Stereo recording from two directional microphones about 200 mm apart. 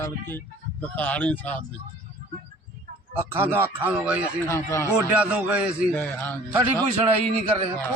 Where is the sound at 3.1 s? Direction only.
10° right (ahead or behind).